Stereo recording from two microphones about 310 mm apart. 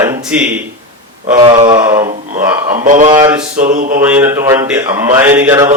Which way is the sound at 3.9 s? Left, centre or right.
Centre.